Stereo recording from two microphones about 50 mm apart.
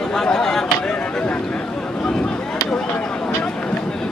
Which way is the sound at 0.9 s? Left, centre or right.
Left.